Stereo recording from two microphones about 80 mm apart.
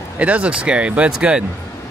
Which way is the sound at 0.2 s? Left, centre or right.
Centre.